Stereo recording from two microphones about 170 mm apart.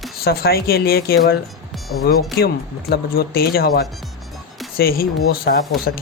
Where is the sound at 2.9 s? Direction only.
65° left (ahead or behind).